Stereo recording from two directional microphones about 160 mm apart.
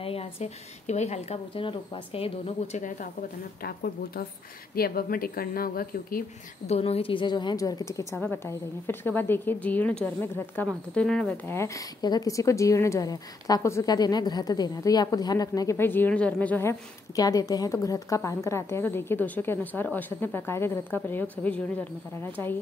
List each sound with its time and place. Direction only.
0.0 s a woman's voice: 40° left (ahead or behind)
1.5 s speech: 30° left (ahead or behind)
3.0 s speech: 65° left (ahead or behind)
6.7 s a woman's voice: 40° left (ahead or behind); by 22.6 s 15° left (ahead or behind)